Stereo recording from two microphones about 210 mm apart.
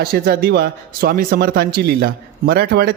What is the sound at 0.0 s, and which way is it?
A man's voice, 45° right (ahead or behind).